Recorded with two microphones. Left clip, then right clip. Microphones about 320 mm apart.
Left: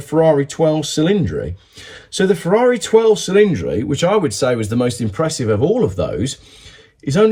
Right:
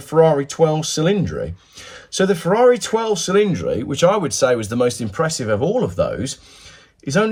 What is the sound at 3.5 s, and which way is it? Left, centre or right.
Speech, centre.